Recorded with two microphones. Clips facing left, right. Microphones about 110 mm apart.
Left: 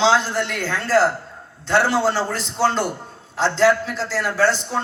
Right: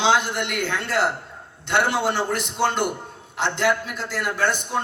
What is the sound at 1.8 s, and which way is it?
Speech, 60° right (ahead or behind).